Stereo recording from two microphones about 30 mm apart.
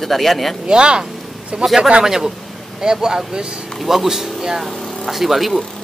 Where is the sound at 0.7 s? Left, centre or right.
Right.